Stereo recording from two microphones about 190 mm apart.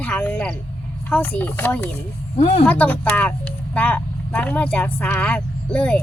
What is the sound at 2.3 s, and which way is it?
Speech, 40° left (ahead or behind).